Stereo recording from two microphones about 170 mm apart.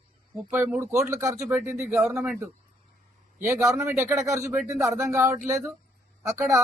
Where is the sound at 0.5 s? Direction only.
15° right (ahead or behind).